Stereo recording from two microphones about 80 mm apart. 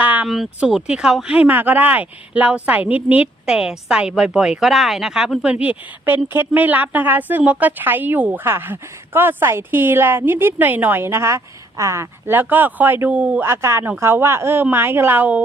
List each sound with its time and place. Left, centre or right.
0.0 s a sound: right
0.3 s speech: centre
3.4 s a woman's voice: centre
13.4 s speech: right